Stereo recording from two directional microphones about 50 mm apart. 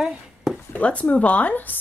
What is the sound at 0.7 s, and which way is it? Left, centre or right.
Speech, left.